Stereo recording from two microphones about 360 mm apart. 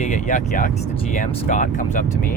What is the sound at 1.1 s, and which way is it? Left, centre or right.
Speech, left.